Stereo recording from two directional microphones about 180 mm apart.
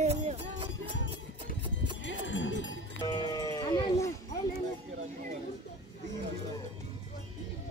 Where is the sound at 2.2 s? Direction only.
90° left.